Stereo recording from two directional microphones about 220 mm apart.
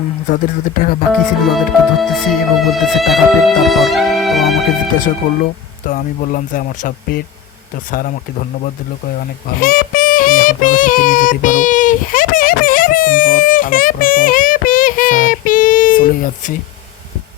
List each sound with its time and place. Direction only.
0.3 s speech: 40° left (ahead or behind)
1.1 s speech: centre (ahead or behind)
5.2 s speech: 35° left (ahead or behind)
9.6 s child singing: 40° left (ahead or behind)